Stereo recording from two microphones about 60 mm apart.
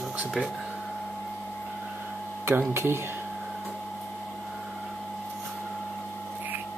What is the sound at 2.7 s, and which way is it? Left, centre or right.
Speech, right.